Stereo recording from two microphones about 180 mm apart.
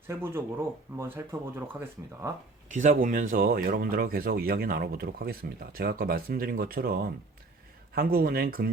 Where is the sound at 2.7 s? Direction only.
50° right (ahead or behind).